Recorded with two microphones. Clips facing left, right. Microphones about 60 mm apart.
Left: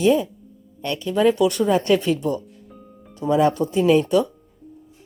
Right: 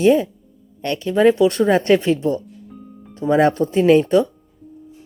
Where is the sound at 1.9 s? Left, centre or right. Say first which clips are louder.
Right 3 dB; right.